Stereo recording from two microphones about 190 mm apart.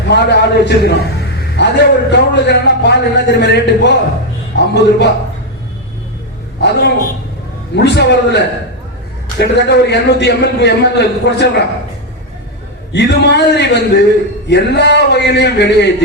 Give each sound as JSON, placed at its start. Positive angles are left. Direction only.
{"t": 0.1, "sound": "a man's voice", "side_deg": 65}
{"t": 6.6, "sound": "a man's voice", "side_deg": 60}
{"t": 12.9, "sound": "a man's voice", "side_deg": 65}